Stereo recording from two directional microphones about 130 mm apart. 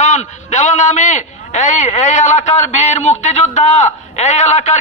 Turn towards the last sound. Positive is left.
turn(degrees=60)  # may be behind; listen again after turning